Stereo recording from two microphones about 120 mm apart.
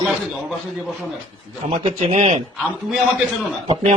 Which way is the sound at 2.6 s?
Centre (ahead or behind).